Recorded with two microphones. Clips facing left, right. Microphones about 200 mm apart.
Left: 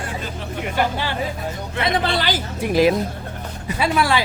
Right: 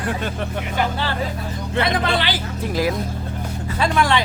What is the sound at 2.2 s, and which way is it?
Speech, 45° left (ahead or behind).